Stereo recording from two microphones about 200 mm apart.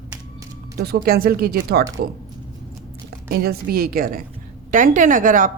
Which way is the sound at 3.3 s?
50° right (ahead or behind).